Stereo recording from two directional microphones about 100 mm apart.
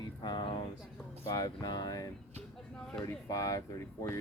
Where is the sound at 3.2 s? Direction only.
35° left (ahead or behind).